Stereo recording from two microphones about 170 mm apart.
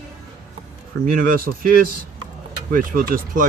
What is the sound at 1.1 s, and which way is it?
Speech, 55° right (ahead or behind).